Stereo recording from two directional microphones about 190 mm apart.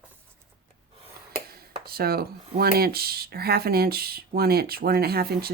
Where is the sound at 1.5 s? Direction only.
55° right (ahead or behind).